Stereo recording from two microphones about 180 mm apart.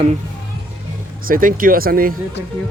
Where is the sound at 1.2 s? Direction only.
50° right (ahead or behind).